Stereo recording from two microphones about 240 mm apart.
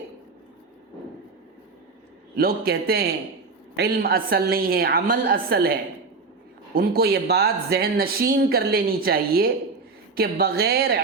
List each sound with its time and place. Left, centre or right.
2.3 s speech: right
6.7 s speech: right